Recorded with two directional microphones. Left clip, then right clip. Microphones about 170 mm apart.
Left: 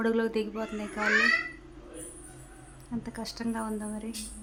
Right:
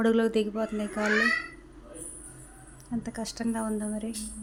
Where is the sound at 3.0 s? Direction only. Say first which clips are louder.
Right 2 dB; 15° right (ahead or behind).